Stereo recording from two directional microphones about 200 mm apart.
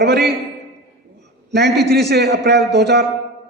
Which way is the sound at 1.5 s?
55° right (ahead or behind).